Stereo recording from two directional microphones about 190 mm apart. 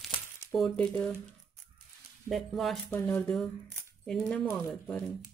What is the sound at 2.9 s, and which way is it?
Speech, 10° left (ahead or behind).